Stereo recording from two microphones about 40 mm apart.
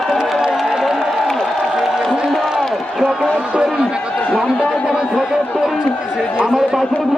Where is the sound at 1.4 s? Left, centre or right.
Centre.